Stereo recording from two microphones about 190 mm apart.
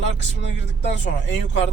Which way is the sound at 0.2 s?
65° left (ahead or behind).